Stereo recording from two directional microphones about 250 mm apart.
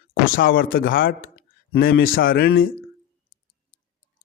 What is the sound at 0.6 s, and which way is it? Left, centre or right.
Speech, left.